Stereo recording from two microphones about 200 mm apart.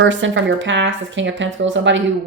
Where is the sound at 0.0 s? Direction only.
70° right (ahead or behind).